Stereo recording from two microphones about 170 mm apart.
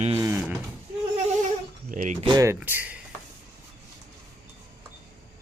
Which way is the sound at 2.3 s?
20° right (ahead or behind).